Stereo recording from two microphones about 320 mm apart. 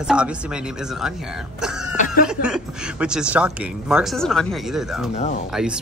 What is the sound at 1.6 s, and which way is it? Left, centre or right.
Cough, centre.